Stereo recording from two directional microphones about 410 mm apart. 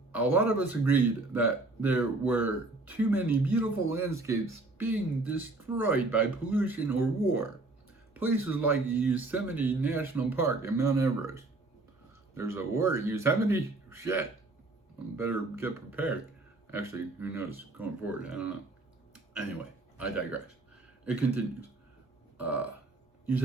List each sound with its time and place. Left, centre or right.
0.1 s speech: centre
20.0 s speech: centre
22.4 s burping: centre